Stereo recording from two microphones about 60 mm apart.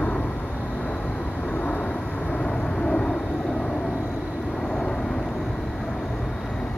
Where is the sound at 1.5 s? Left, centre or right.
Left.